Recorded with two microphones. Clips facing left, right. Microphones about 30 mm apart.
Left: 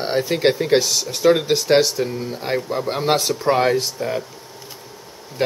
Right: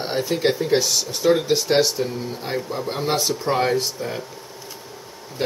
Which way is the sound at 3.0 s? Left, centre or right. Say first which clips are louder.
Left 3 dB; left.